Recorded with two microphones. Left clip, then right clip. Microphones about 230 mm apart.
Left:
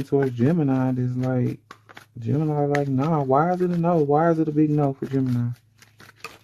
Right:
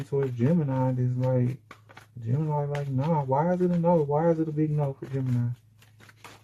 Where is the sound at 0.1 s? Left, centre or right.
Left.